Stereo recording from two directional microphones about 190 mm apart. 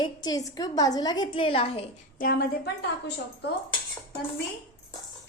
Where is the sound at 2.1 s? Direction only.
50° left (ahead or behind).